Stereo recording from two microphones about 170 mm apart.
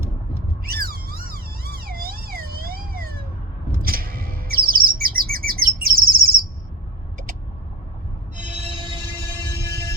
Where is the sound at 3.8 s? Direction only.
60° right (ahead or behind).